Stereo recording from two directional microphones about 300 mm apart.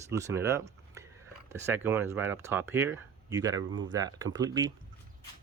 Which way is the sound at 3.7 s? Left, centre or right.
Right.